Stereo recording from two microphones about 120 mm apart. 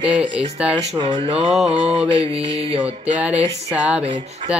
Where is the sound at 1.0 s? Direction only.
45° right (ahead or behind).